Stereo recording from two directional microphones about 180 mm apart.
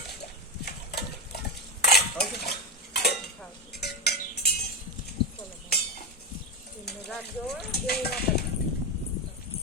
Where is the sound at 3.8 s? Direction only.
65° left (ahead or behind).